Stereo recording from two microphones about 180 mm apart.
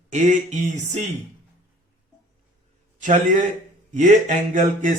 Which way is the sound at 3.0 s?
45° right (ahead or behind).